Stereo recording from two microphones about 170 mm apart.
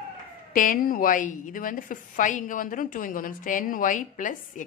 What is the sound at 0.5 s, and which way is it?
A woman's voice, 50° left (ahead or behind).